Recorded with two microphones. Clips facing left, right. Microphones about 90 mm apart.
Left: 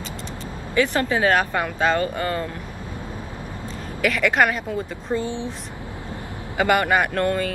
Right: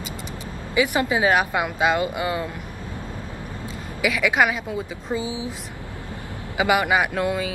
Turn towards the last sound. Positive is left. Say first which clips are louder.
# left 2 dB
turn(degrees=-5)  # may be behind; listen again after turning